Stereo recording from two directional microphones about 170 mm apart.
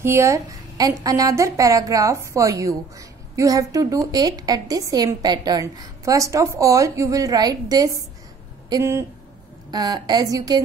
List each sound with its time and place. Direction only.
0.0 s a woman's voice: 15° right (ahead or behind)